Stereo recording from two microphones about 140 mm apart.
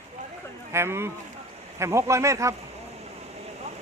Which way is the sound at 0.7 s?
20° right (ahead or behind).